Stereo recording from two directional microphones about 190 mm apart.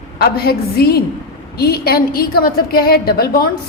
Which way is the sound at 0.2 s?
55° left (ahead or behind).